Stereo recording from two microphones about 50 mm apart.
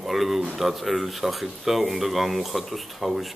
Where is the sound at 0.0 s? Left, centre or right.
Centre.